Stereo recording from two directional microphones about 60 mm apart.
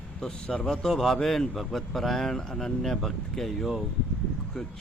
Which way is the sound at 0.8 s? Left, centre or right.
Centre.